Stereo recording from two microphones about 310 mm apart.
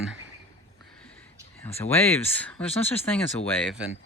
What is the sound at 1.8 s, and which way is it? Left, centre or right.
Speech, centre.